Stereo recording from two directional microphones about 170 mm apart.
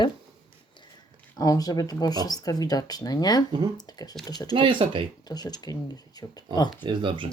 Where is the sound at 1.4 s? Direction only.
20° left (ahead or behind).